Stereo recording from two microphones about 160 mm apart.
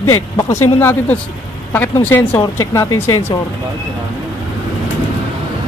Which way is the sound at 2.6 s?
20° left (ahead or behind).